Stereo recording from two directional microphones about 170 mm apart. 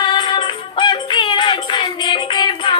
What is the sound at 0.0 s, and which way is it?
Music, 25° left (ahead or behind).